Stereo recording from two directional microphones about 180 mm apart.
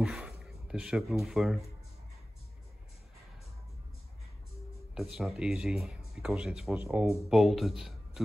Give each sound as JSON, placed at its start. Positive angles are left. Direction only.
{"t": 0.0, "sound": "speech", "side_deg": 0}
{"t": 4.9, "sound": "speech", "side_deg": -5}